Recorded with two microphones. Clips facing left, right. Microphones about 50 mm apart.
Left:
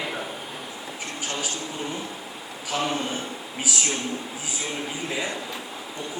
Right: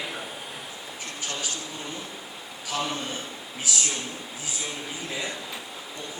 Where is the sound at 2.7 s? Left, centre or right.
Left.